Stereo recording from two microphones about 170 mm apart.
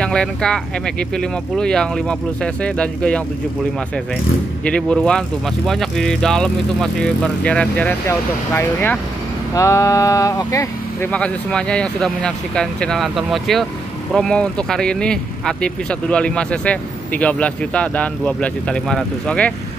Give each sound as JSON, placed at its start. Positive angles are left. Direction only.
{"t": 0.0, "sound": "speech", "side_deg": 5}
{"t": 4.6, "sound": "speech", "side_deg": 5}
{"t": 11.1, "sound": "speech", "side_deg": 5}